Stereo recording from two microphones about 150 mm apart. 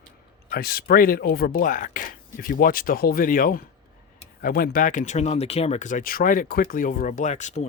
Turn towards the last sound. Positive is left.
turn(degrees=50)  # may be behind; listen again after turning